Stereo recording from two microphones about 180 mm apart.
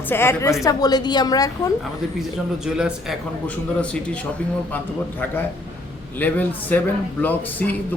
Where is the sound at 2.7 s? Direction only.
5° right (ahead or behind).